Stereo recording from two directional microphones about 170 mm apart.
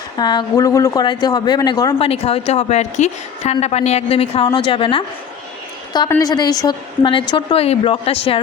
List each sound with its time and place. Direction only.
0.2 s a woman's voice: 25° left (ahead or behind)
2.0 s a woman's voice: 35° left (ahead or behind)
6.1 s a woman's voice: 20° left (ahead or behind)